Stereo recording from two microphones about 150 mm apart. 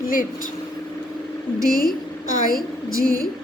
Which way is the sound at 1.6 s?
65° left (ahead or behind).